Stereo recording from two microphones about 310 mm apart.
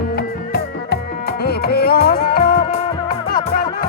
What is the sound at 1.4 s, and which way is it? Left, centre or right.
Music, left.